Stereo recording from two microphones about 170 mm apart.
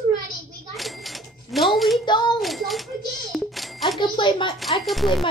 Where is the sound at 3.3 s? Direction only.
Centre (ahead or behind).